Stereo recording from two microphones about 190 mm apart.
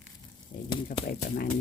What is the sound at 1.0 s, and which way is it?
Speech, 50° left (ahead or behind).